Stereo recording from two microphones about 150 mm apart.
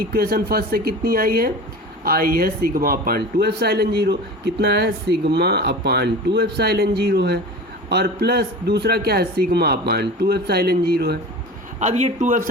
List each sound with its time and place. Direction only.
0.0 s speech: 90° right
11.8 s a man's voice: 50° right (ahead or behind)